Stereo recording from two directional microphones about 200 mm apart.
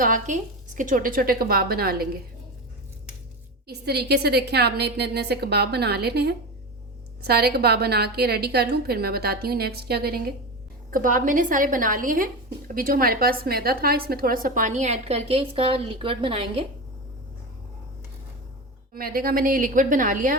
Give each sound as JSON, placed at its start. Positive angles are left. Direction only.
{"t": 0.0, "sound": "speech", "side_deg": -40}
{"t": 3.7, "sound": "a woman's voice", "side_deg": -55}
{"t": 18.9, "sound": "speech", "side_deg": -45}